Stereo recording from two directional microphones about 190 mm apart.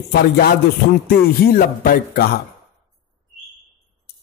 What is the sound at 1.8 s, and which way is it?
Speech, 55° left (ahead or behind).